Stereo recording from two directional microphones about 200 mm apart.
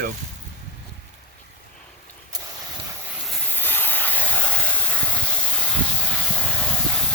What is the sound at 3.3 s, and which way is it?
Hiss, 10° left (ahead or behind).